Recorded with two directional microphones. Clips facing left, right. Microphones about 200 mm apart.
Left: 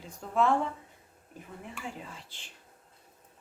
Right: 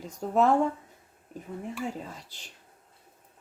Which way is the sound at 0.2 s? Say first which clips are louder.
Right 4 dB; 40° right (ahead or behind).